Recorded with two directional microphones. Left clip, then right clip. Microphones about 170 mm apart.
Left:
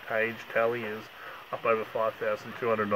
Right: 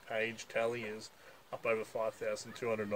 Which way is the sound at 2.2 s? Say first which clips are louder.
Left 8 dB; 35° right (ahead or behind).